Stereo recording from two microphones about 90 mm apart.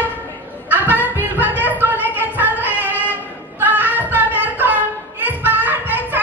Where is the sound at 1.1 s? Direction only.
20° right (ahead or behind).